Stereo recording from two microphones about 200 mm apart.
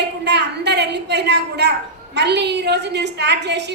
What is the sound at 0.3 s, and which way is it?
A woman's voice, 60° right (ahead or behind).